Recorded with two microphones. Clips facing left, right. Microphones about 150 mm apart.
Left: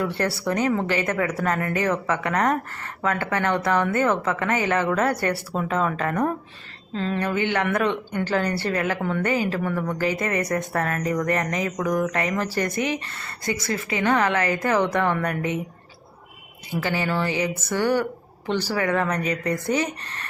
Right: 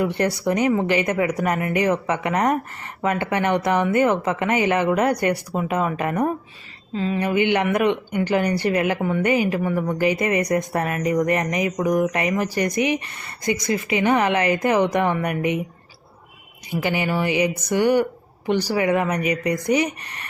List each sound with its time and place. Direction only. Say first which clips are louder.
0.0 s speech: right 3 dB; 20° right (ahead or behind)
16.8 s speech: right 2 dB; 15° right (ahead or behind)